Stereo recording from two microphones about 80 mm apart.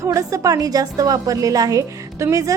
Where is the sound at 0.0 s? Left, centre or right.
Right.